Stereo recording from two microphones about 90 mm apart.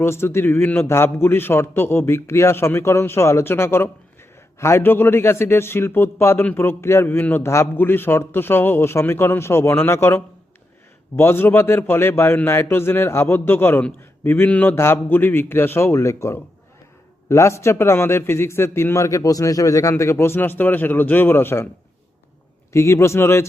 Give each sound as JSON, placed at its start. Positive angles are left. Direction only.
{"t": 0.0, "sound": "a man's voice", "side_deg": 30}
{"t": 22.7, "sound": "speech", "side_deg": 30}